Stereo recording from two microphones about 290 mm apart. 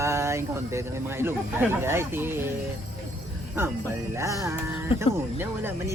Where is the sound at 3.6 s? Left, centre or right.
Centre.